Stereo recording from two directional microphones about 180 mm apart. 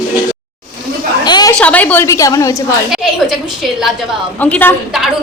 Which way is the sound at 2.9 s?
Centre (ahead or behind).